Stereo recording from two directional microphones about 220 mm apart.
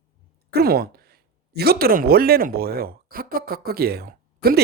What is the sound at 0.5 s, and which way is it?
Speech, 45° right (ahead or behind).